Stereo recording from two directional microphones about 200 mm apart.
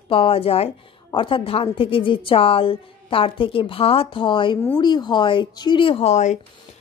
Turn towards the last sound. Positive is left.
turn(degrees=35)  # may be behind; listen again after turning